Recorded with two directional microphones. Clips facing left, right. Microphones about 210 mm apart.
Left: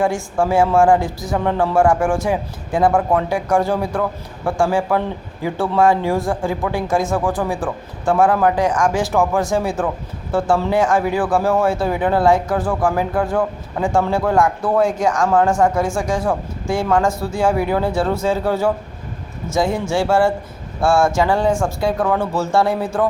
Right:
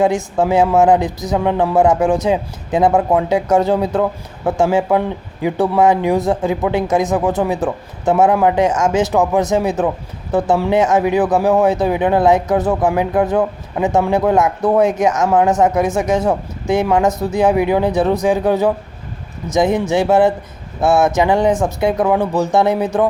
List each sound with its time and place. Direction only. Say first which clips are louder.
0.0 s speech: right 3 dB; 20° right (ahead or behind)